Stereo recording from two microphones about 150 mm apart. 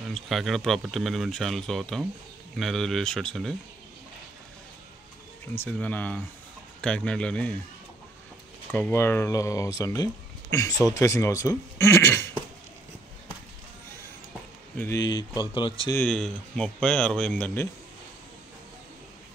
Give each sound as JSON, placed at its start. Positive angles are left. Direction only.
{"t": 0.1, "sound": "speech", "side_deg": 0}
{"t": 5.5, "sound": "speech", "side_deg": 10}
{"t": 8.7, "sound": "speech", "side_deg": 15}
{"t": 14.8, "sound": "speech", "side_deg": 20}
{"t": 16.1, "sound": "speech", "side_deg": 5}